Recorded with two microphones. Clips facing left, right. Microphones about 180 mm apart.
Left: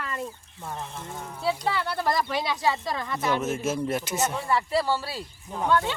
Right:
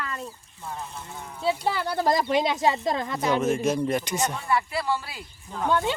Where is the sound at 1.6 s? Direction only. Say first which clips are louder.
Right 2 dB; 15° right (ahead or behind).